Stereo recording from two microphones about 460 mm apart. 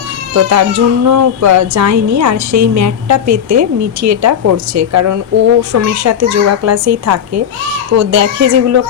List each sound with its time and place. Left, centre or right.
0.3 s speech: right